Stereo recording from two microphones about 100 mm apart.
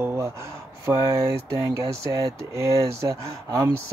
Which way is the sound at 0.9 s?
35° right (ahead or behind).